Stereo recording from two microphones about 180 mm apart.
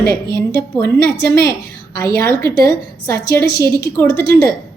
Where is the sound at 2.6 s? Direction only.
15° left (ahead or behind).